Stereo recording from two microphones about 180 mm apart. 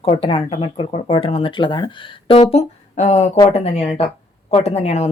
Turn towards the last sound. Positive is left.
turn(degrees=35)  # may be behind; listen again after turning